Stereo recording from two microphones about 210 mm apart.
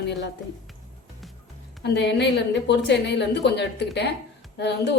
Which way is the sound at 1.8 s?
55° left (ahead or behind).